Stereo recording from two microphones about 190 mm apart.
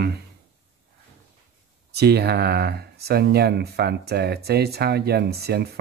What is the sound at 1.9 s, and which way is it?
Speech, 60° right (ahead or behind).